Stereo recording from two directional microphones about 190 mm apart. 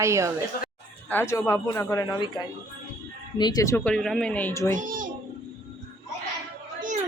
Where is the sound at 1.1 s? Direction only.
15° left (ahead or behind).